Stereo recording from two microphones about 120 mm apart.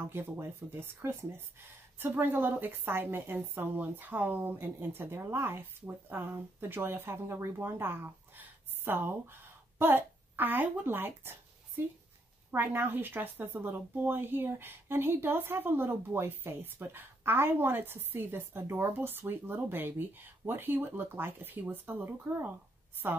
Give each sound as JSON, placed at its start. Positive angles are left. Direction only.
{"t": 0.1, "sound": "a woman's voice", "side_deg": -20}
{"t": 12.4, "sound": "a woman's voice", "side_deg": -15}